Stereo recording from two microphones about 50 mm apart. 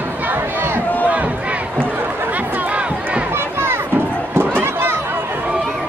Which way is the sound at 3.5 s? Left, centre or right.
Right.